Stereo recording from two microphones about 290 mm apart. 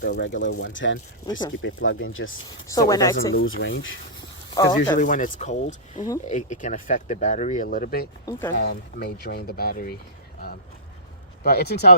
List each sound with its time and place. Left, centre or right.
0.0 s speech: left
1.3 s speech: centre
1.6 s speech: left
2.6 s speech: centre
3.3 s speech: left
4.6 s speech: centre
4.9 s speech: left
11.4 s speech: left